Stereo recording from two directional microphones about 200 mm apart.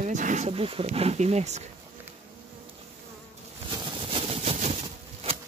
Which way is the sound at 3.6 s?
25° right (ahead or behind).